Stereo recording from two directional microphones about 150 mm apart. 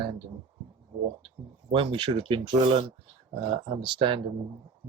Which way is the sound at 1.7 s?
35° right (ahead or behind).